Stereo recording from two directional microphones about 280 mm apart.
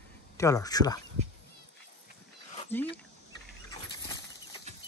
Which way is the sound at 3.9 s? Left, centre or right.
Centre.